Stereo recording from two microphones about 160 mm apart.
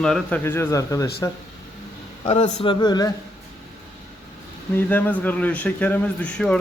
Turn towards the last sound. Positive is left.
turn(degrees=5)  # may be behind; listen again after turning